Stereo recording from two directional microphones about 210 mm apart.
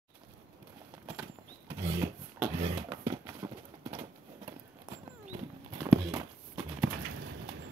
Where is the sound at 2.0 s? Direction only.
15° right (ahead or behind).